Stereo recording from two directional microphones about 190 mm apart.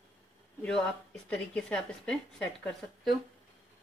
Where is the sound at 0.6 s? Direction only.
5° left (ahead or behind).